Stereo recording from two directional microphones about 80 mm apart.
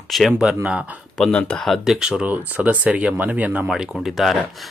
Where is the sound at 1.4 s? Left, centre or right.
Centre.